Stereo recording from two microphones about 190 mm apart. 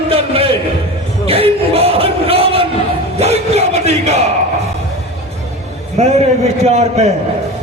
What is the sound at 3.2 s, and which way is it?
Crowd, 35° right (ahead or behind).